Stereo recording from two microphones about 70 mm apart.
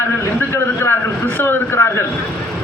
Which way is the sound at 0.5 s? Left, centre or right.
Left.